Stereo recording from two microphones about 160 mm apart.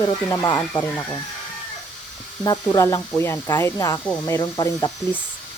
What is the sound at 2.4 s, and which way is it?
Speech, 25° left (ahead or behind).